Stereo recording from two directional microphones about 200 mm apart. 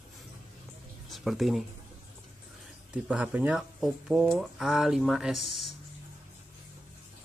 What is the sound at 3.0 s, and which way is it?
Speech, 5° right (ahead or behind).